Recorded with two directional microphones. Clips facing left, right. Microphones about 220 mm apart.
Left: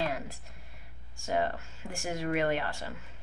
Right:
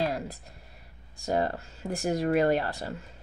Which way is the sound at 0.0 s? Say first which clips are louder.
Right 4 dB; 35° right (ahead or behind).